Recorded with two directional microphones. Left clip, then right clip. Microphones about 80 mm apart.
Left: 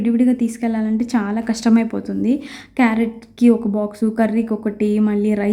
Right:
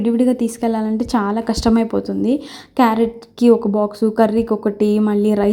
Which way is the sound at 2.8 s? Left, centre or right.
Right.